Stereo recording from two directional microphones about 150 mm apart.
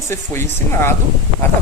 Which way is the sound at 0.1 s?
15° left (ahead or behind).